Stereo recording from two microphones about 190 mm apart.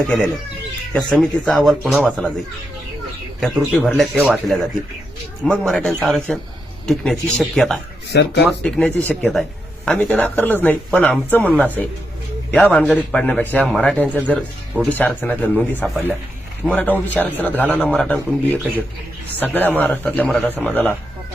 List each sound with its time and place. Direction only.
0.0 s speech: 5° left (ahead or behind)
2.0 s speech: 5° left (ahead or behind)
3.4 s speech: centre (ahead or behind)
8.1 s speech: 60° left (ahead or behind)
8.4 s speech: 5° left (ahead or behind)